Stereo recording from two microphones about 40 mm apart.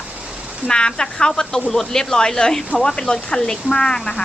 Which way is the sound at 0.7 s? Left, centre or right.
Centre.